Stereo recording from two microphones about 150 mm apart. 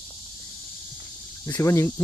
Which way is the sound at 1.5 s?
20° left (ahead or behind).